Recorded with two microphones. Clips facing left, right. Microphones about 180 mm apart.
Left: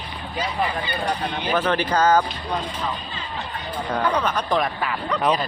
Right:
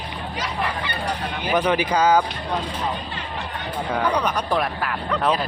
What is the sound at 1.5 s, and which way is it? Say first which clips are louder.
Speech: right 2 dB; 15° right (ahead or behind).